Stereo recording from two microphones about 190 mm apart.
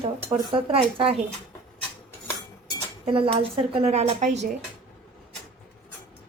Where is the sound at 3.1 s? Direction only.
30° right (ahead or behind).